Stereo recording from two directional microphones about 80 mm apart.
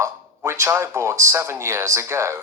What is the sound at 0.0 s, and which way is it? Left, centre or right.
Speech, right.